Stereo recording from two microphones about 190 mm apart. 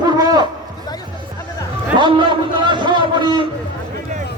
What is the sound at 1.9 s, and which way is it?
A man's voice, 25° right (ahead or behind).